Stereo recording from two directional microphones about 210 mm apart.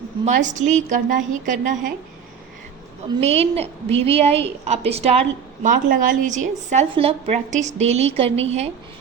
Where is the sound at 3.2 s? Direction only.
30° right (ahead or behind).